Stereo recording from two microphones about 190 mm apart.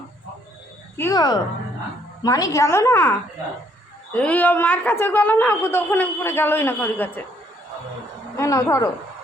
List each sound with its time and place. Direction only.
0.9 s a woman's voice: 15° left (ahead or behind)
8.4 s a woman's voice: 15° left (ahead or behind)